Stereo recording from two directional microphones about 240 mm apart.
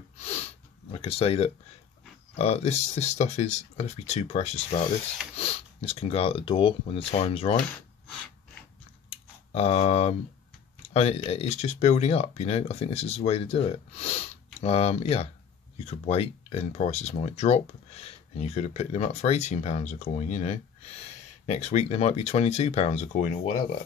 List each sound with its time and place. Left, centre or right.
0.2 s snort: left
0.9 s speech: left
9.1 s typing: left
10.9 s speech: left